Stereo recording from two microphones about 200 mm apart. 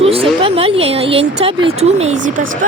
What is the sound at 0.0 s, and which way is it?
Speech, 30° right (ahead or behind).